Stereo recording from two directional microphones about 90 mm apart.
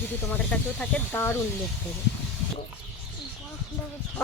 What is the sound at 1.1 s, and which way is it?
Speech, 25° left (ahead or behind).